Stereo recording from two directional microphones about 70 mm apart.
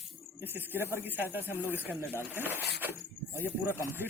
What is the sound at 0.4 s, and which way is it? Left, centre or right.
Speech, right.